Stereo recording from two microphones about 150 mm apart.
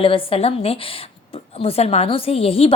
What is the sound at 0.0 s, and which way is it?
A woman's voice, 35° left (ahead or behind).